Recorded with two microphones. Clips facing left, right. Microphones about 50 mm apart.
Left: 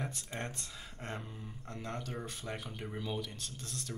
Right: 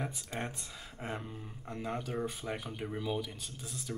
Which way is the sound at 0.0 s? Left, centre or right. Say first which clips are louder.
Right 2 dB; centre.